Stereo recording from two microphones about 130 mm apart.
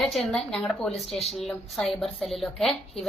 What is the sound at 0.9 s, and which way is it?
Speech, 50° left (ahead or behind).